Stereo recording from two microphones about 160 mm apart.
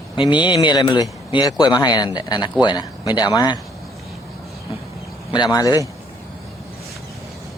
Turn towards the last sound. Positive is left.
turn(degrees=25)  # may be behind; listen again after turning